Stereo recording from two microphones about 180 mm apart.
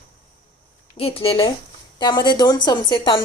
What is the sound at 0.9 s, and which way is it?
A woman's voice, 35° left (ahead or behind).